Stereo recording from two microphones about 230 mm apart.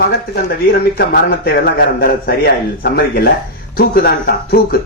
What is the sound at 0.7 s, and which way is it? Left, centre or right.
A man's voice, left.